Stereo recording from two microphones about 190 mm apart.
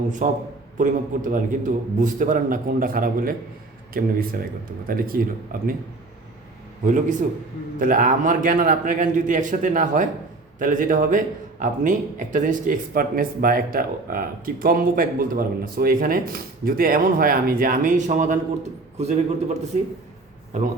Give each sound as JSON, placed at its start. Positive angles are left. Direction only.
{"t": 0.2, "sound": "a man's voice", "side_deg": -40}
{"t": 6.8, "sound": "a man's voice", "side_deg": -40}